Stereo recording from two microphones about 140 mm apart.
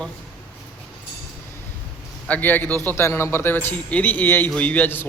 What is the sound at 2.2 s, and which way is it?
A man's voice, 10° left (ahead or behind).